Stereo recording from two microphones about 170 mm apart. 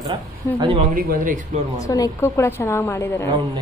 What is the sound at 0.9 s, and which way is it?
Speech, 55° right (ahead or behind).